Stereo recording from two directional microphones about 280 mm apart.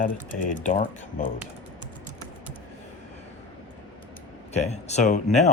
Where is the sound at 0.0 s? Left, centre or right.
Left.